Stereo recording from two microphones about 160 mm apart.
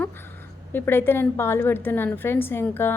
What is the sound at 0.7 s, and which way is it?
A woman's voice, 15° left (ahead or behind).